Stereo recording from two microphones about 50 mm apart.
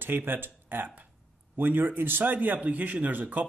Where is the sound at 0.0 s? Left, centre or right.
Right.